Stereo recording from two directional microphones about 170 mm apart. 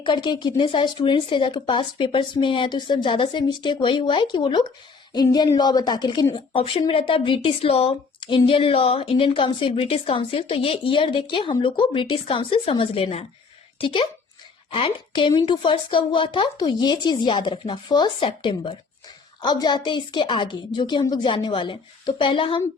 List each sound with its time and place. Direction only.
0.0 s a woman's voice: 25° left (ahead or behind)